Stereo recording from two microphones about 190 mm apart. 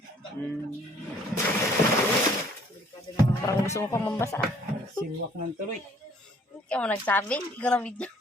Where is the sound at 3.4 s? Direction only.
15° left (ahead or behind).